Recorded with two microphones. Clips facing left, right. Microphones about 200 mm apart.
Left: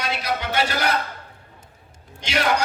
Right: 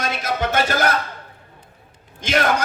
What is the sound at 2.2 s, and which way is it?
Speech, 50° right (ahead or behind).